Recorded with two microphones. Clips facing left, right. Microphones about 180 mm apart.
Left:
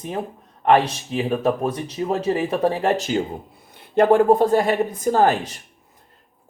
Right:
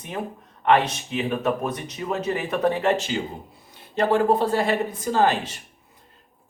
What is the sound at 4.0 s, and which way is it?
Speech, 50° left (ahead or behind).